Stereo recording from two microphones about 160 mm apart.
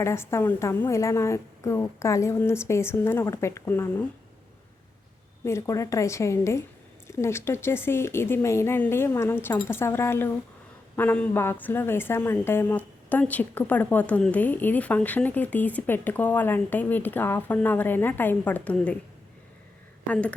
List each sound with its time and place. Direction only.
0.0 s a woman's voice: 15° left (ahead or behind)
5.5 s a woman's voice: 15° left (ahead or behind)
20.1 s a woman's voice: 5° left (ahead or behind)